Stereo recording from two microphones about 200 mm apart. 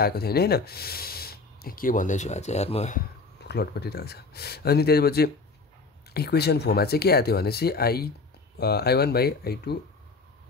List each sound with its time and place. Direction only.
0.0 s speech: 50° left (ahead or behind); by 3.0 s 35° left (ahead or behind)
3.4 s speech: 55° left (ahead or behind)